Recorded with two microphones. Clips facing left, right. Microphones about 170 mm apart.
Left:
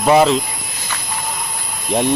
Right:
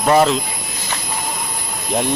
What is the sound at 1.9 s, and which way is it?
Speech, centre (ahead or behind).